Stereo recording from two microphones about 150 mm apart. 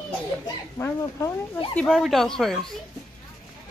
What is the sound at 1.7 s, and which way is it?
Speech, centre (ahead or behind).